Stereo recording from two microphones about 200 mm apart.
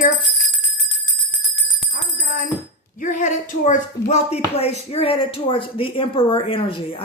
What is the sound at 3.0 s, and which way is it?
Speech, 35° left (ahead or behind).